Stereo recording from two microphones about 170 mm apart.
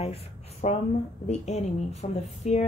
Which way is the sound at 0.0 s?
40° left (ahead or behind).